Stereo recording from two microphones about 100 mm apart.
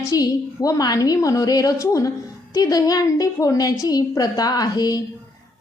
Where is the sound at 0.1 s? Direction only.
35° left (ahead or behind).